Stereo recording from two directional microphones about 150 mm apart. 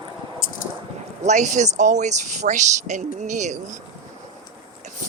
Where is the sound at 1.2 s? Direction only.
55° right (ahead or behind).